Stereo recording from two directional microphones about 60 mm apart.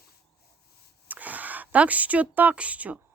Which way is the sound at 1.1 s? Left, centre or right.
Right.